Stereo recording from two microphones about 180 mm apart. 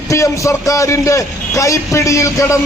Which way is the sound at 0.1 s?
15° left (ahead or behind).